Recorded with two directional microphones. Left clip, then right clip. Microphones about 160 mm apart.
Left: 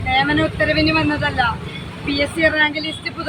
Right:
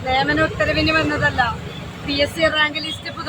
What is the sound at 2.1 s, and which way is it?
Speech, 25° right (ahead or behind).